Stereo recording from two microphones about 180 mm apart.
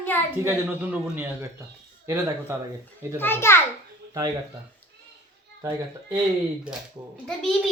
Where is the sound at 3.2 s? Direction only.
15° left (ahead or behind).